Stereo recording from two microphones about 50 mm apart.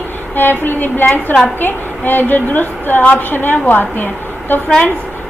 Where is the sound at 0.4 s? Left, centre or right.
Left.